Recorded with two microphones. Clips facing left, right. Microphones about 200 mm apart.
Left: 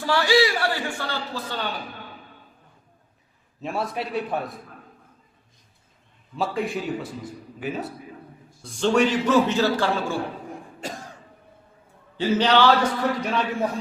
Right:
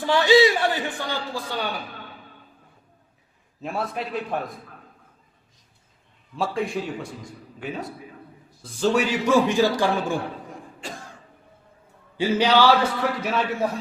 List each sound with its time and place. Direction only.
0.0 s a man's voice: 20° right (ahead or behind)
3.6 s speech: centre (ahead or behind)
6.3 s a man's voice: centre (ahead or behind); by 10.2 s 15° right (ahead or behind)
10.8 s cough: 45° left (ahead or behind)
12.1 s a man's voice: 10° right (ahead or behind)